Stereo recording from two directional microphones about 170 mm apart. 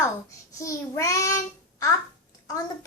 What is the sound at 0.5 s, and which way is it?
Child singing, 20° left (ahead or behind).